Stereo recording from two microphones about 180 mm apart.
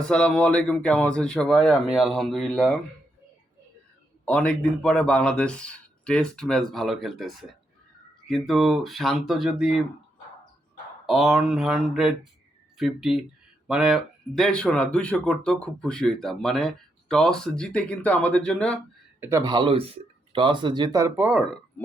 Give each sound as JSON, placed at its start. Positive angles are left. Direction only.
{"t": 0.0, "sound": "speech", "side_deg": 5}
{"t": 4.3, "sound": "speech", "side_deg": 5}
{"t": 11.0, "sound": "speech", "side_deg": 0}
{"t": 19.2, "sound": "speech", "side_deg": -20}
{"t": 21.2, "sound": "speech", "side_deg": 0}